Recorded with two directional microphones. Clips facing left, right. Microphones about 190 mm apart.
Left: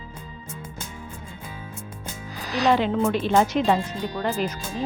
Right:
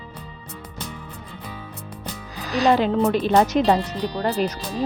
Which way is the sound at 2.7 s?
35° right (ahead or behind).